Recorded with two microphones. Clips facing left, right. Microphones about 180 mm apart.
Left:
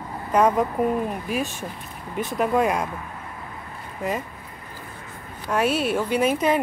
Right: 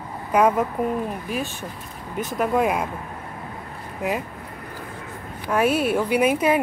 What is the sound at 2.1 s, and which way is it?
Speech, centre (ahead or behind).